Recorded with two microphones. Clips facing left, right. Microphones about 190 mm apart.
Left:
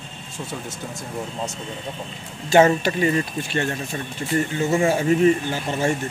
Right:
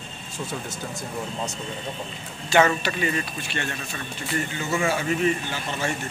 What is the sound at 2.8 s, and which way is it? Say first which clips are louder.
Speech: left 6 dB; 35° left (ahead or behind).